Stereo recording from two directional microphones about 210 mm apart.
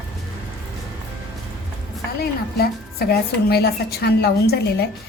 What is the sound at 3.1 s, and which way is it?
A woman's voice, 50° left (ahead or behind).